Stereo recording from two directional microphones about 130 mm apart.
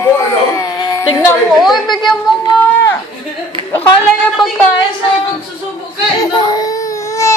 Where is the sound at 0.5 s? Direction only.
30° left (ahead or behind).